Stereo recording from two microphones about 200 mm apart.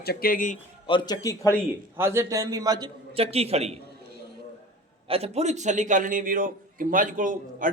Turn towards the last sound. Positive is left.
turn(degrees=-40)  # may be behind; listen again after turning